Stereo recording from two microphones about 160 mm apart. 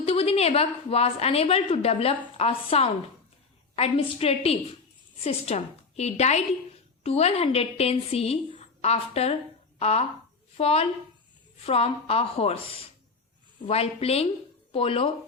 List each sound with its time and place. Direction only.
0.0 s a woman's voice: 40° left (ahead or behind)
13.7 s a woman's voice: 40° left (ahead or behind)